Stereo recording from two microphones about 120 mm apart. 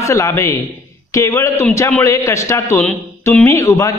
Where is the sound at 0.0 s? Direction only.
25° left (ahead or behind).